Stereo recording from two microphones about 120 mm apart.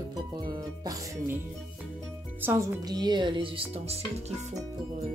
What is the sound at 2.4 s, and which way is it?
Speech, 20° right (ahead or behind).